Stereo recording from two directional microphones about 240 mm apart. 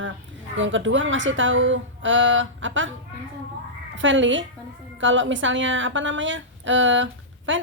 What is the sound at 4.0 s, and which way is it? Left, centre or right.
Speech, right.